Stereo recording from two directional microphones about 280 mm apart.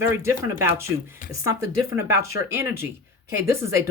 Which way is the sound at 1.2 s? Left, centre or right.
Left.